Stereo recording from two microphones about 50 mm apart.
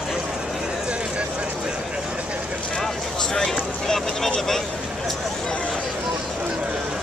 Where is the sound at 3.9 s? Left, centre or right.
Centre.